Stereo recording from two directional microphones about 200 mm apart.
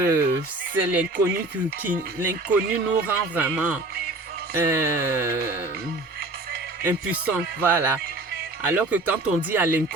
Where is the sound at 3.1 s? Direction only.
10° right (ahead or behind).